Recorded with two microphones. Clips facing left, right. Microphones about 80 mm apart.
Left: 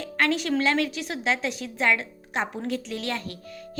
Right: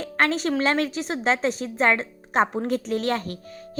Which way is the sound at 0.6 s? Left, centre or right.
Right.